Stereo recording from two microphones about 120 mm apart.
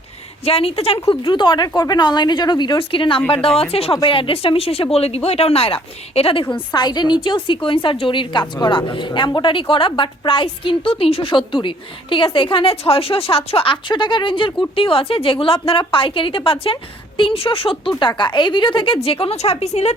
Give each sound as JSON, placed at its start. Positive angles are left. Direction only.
{"t": 0.4, "sound": "a woman's voice", "side_deg": 55}
{"t": 6.7, "sound": "a woman's voice", "side_deg": 35}